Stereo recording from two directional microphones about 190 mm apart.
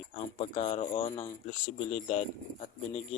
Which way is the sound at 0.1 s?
30° left (ahead or behind).